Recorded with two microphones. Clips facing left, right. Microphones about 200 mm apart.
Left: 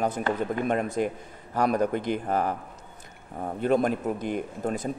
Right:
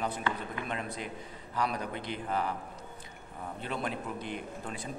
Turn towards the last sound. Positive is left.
turn(degrees=45)  # may be behind; listen again after turning